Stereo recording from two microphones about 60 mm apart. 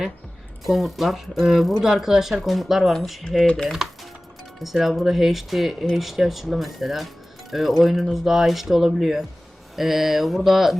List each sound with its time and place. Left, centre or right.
0.6 s speech: centre
2.9 s speech: centre
3.4 s speech: centre
4.6 s speech: centre